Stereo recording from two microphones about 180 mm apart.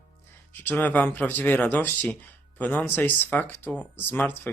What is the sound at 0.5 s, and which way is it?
Speech, 10° left (ahead or behind).